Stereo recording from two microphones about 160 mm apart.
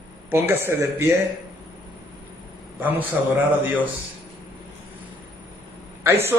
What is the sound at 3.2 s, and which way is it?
Speech, 5° right (ahead or behind).